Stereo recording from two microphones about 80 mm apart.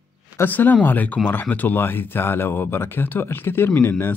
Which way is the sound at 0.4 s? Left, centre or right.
Left.